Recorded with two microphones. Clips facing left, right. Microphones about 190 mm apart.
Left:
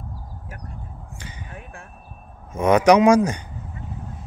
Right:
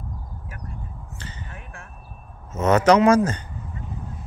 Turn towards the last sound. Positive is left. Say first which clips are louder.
# left 1 dB
turn(degrees=15)  # may be behind; listen again after turning